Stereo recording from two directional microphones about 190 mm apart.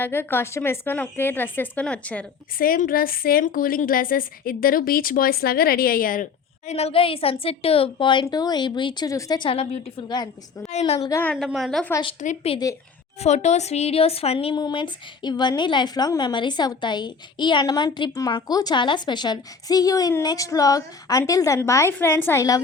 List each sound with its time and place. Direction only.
0.0 s a woman's voice: 10° left (ahead or behind)
2.6 s a woman's voice: 50° left (ahead or behind)
6.7 s a woman's voice: 35° left (ahead or behind)
11.1 s a woman's voice: 10° left (ahead or behind)
11.3 s a woman's voice: centre (ahead or behind)
12.2 s a woman's voice: 35° left (ahead or behind); by 22.6 s 15° left (ahead or behind)